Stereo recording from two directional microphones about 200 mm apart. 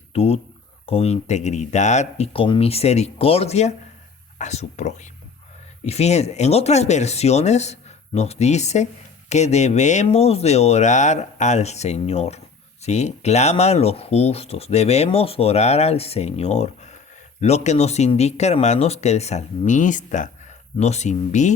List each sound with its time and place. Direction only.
0.1 s speech: 30° left (ahead or behind)